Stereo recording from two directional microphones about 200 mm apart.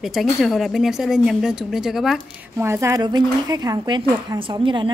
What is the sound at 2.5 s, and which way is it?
Speech, 15° right (ahead or behind).